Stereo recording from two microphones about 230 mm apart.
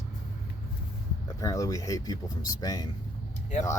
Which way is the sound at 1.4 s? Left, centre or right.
Centre.